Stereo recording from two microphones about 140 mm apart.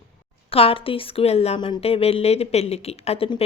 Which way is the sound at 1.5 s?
35° left (ahead or behind).